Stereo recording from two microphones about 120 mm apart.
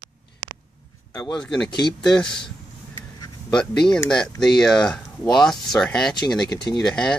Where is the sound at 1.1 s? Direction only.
40° left (ahead or behind).